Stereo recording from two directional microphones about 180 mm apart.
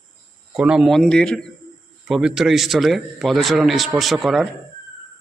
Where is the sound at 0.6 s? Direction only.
5° right (ahead or behind).